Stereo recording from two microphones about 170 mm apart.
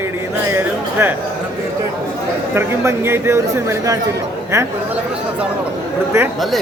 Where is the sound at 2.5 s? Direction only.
15° right (ahead or behind).